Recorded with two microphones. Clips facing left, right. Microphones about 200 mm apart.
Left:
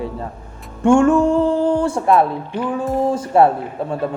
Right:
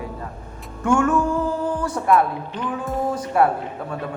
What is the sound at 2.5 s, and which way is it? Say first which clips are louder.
Music: left 6 dB; 10° left (ahead or behind).